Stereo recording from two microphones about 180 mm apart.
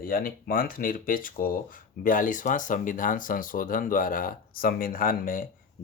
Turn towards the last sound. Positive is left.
turn(degrees=50)  # may be behind; listen again after turning